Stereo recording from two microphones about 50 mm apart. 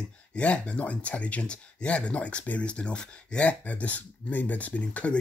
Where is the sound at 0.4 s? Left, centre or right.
Left.